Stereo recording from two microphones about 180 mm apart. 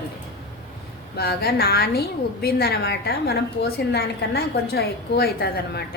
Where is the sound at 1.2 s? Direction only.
60° left (ahead or behind).